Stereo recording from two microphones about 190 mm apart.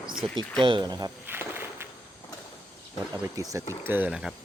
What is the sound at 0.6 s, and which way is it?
Walk, 25° right (ahead or behind).